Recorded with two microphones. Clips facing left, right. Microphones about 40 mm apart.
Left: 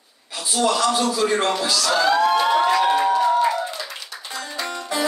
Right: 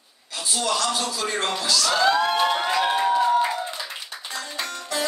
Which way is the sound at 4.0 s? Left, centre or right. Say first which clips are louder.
Left 1 dB; right.